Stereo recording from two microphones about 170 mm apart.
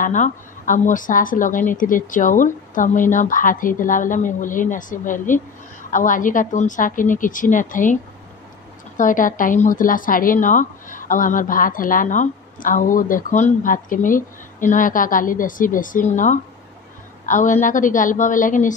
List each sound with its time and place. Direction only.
0.0 s a woman's voice: 50° left (ahead or behind)